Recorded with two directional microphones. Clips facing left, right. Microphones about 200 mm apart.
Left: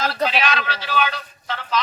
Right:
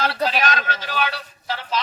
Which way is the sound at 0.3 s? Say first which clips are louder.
Even; 45° right (ahead or behind).